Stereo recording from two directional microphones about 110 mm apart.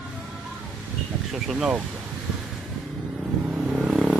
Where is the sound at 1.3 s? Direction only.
5° right (ahead or behind).